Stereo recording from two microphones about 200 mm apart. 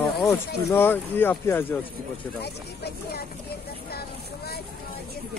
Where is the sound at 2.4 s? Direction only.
50° left (ahead or behind).